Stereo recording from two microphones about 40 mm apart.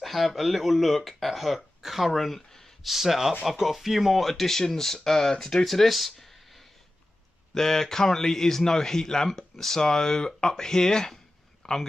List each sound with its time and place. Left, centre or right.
0.0 s a man's voice: centre